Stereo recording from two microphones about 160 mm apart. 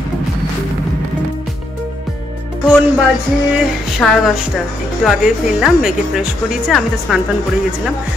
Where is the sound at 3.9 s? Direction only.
Centre (ahead or behind).